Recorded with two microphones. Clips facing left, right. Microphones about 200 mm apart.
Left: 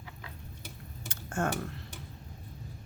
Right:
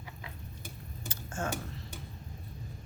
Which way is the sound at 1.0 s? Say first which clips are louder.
Left 5 dB; 60° left (ahead or behind).